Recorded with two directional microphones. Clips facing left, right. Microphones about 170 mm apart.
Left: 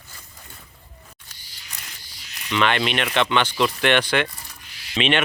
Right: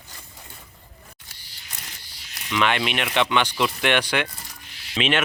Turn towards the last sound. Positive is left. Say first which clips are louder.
# left 2 dB
turn(degrees=-5)  # may be behind; listen again after turning